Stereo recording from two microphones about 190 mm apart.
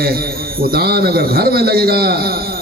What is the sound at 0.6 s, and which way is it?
A man's voice, 55° right (ahead or behind).